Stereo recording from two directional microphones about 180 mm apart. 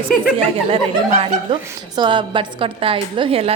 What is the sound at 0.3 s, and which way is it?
A woman's voice, 35° right (ahead or behind).